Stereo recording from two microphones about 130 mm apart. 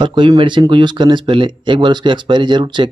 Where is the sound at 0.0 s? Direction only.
35° right (ahead or behind).